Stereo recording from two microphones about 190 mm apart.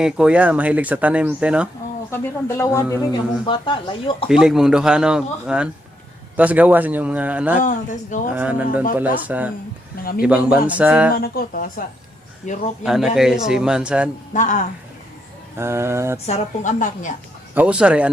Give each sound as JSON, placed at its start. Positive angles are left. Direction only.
{"t": 0.0, "sound": "speech", "side_deg": -5}
{"t": 2.0, "sound": "speech", "side_deg": 15}
{"t": 4.3, "sound": "a man's voice", "side_deg": 0}
{"t": 7.6, "sound": "a woman's voice", "side_deg": 40}
{"t": 8.4, "sound": "speech", "side_deg": -5}
{"t": 10.0, "sound": "speech", "side_deg": 50}
{"t": 10.2, "sound": "a man's voice", "side_deg": -5}
{"t": 11.1, "sound": "speech", "side_deg": 50}
{"t": 12.4, "sound": "a woman's voice", "side_deg": 40}
{"t": 12.8, "sound": "a man's voice", "side_deg": 0}
{"t": 14.3, "sound": "a woman's voice", "side_deg": 40}
{"t": 15.5, "sound": "speech", "side_deg": -15}
{"t": 16.2, "sound": "a woman's voice", "side_deg": 40}
{"t": 17.5, "sound": "speech", "side_deg": -5}